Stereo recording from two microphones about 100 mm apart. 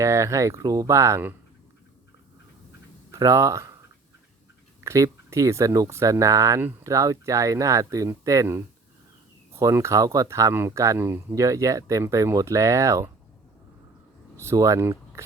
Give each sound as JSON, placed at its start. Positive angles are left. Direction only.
{"t": 0.0, "sound": "speech", "side_deg": -30}
{"t": 3.1, "sound": "speech", "side_deg": -30}
{"t": 4.8, "sound": "speech", "side_deg": -35}
{"t": 14.3, "sound": "speech", "side_deg": -30}